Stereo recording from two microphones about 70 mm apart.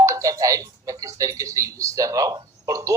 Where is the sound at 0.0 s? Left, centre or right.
Right.